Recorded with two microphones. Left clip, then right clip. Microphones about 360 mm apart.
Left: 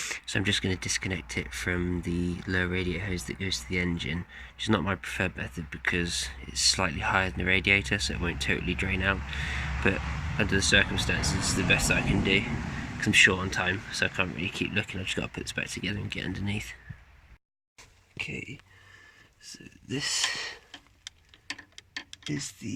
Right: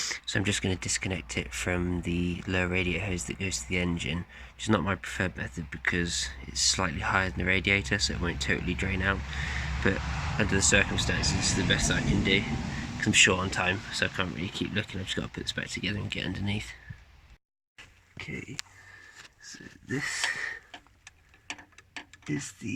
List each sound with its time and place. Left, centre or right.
0.0 s speech: centre
18.6 s a sound: right
22.3 s speech: centre